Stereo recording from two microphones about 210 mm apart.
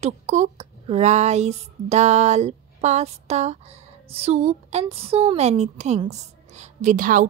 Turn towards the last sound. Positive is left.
turn(degrees=-40)  # may be behind; listen again after turning